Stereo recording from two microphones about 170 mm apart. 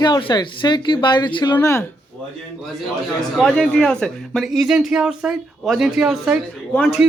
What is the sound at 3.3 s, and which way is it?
Speech, 5° left (ahead or behind).